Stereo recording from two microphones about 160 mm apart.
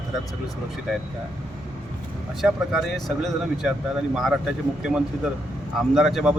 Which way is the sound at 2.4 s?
Centre (ahead or behind).